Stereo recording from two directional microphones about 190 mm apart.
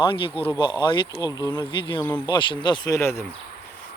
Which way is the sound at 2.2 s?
25° left (ahead or behind).